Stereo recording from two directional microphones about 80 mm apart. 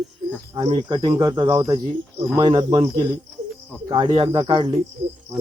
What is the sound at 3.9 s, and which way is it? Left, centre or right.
Speech, right.